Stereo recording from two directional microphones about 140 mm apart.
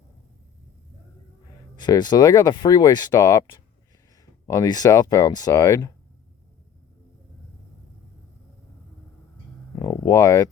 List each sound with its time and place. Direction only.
1.7 s speech: 30° left (ahead or behind)
4.4 s speech: 25° left (ahead or behind)
9.7 s a sound: 25° left (ahead or behind)